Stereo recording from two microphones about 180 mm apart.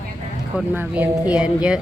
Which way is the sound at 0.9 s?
5° right (ahead or behind).